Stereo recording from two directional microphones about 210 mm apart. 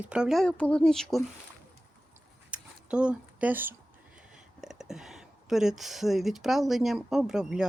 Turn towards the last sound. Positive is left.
turn(degrees=-5)  # may be behind; listen again after turning